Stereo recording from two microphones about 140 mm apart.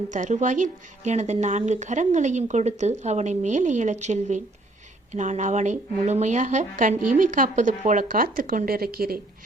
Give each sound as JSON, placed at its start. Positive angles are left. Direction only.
{"t": 0.1, "sound": "a woman's voice", "side_deg": -60}